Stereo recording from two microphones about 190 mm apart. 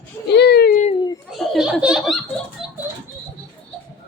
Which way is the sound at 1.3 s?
Centre (ahead or behind).